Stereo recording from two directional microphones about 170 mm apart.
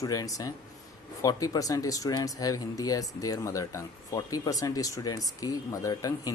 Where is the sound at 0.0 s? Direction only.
20° left (ahead or behind).